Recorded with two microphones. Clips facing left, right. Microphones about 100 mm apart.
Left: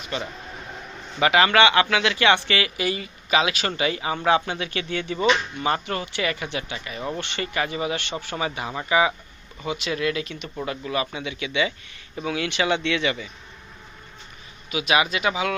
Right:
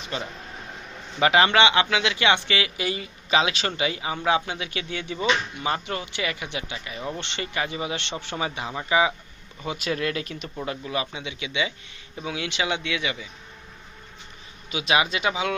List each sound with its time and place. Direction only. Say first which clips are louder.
0.1 s speech: left 2 dB; 30° right (ahead or behind)
9.6 s speech: left 2 dB; 40° right (ahead or behind)
10.7 s speech: left 2 dB; 20° right (ahead or behind)
14.7 s speech: left 1 dB; 30° right (ahead or behind)